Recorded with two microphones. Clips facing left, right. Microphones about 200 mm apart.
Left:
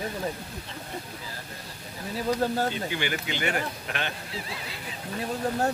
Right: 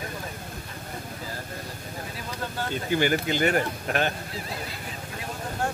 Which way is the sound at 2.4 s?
40° left (ahead or behind).